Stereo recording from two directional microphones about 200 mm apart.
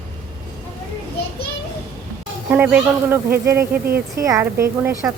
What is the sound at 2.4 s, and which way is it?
Speech, 5° right (ahead or behind).